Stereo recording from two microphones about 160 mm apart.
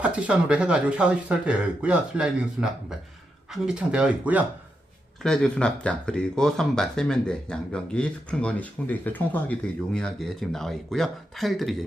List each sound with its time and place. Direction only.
0.0 s speech: 10° right (ahead or behind)
5.2 s speech: 5° left (ahead or behind)